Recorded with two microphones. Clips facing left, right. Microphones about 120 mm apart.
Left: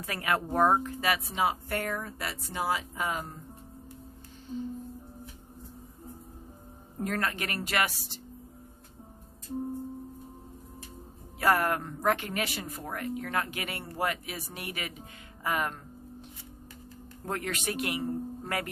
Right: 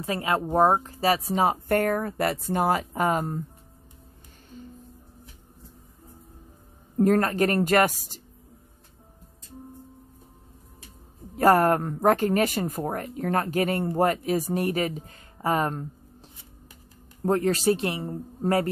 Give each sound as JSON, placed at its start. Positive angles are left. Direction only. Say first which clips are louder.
{"t": 0.0, "sound": "speech", "louder": "right 5 dB", "side_deg": -25}
{"t": 7.0, "sound": "speech", "louder": "right 11 dB", "side_deg": -40}
{"t": 11.3, "sound": "speech", "louder": "right 7 dB", "side_deg": -40}
{"t": 17.2, "sound": "speech", "louder": "right 11 dB", "side_deg": -35}